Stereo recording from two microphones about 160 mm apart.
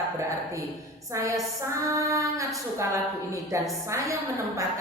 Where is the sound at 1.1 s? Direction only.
20° right (ahead or behind).